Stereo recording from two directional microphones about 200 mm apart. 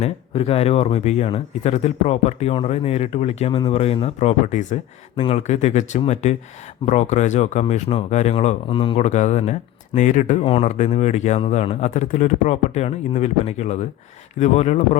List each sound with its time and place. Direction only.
0.0 s speech: 30° left (ahead or behind)